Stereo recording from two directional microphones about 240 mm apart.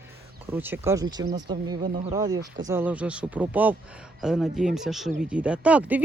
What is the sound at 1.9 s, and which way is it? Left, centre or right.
Speech, right.